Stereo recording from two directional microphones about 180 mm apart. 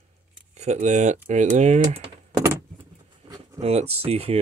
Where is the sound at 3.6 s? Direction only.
35° right (ahead or behind).